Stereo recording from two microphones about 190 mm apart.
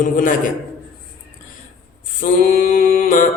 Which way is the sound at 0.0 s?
45° left (ahead or behind).